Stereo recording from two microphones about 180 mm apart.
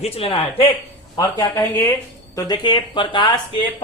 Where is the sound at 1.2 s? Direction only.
15° left (ahead or behind).